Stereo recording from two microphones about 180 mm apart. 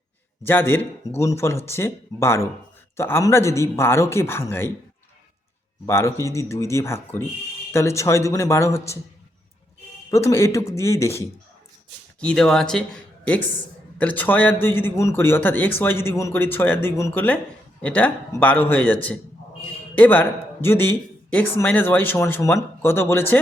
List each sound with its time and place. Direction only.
0.4 s speech: 10° left (ahead or behind)
5.8 s speech: 15° left (ahead or behind)
10.1 s speech: 15° left (ahead or behind)
12.2 s speech: 5° left (ahead or behind)
20.0 s speech: 10° left (ahead or behind)